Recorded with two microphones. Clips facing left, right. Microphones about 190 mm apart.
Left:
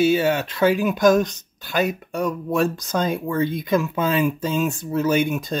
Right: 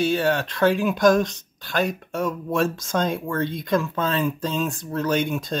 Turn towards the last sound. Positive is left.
turn(degrees=5)  # may be behind; listen again after turning